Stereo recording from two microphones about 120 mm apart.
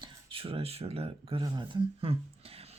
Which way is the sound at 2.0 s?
55° right (ahead or behind).